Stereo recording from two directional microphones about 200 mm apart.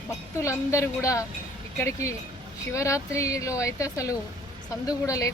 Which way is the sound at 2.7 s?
15° left (ahead or behind).